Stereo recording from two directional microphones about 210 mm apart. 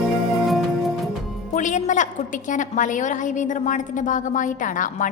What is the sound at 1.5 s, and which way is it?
A woman's voice, 35° left (ahead or behind).